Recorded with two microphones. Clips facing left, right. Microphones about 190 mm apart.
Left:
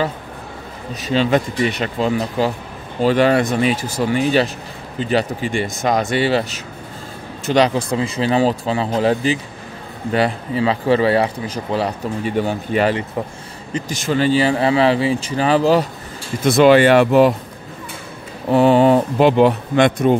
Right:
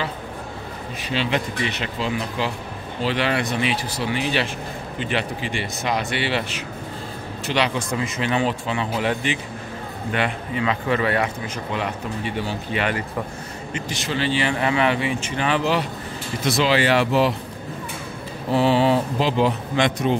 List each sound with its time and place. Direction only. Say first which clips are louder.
1.0 s speech: left 7 dB; 40° left (ahead or behind)
12.4 s speech: left 9 dB; 50° left (ahead or behind)
16.4 s speech: left 9 dB; 55° left (ahead or behind)
18.5 s speech: left 6 dB; 50° left (ahead or behind)